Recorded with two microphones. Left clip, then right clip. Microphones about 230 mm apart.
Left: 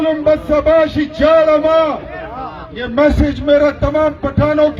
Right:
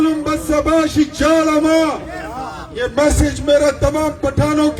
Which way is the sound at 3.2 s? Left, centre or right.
Left.